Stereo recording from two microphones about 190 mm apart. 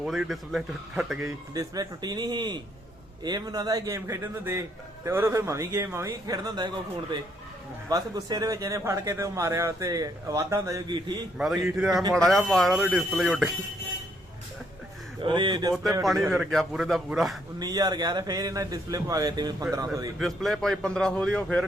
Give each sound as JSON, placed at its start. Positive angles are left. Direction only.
{"t": 0.0, "sound": "a man's voice", "side_deg": -5}
{"t": 1.5, "sound": "a man's voice", "side_deg": -20}
{"t": 7.9, "sound": "a man's voice", "side_deg": -20}
{"t": 11.3, "sound": "a man's voice", "side_deg": -5}
{"t": 15.2, "sound": "speech", "side_deg": -25}
{"t": 15.7, "sound": "a man's voice", "side_deg": 0}
{"t": 17.6, "sound": "speech", "side_deg": -20}
{"t": 20.1, "sound": "a man's voice", "side_deg": 0}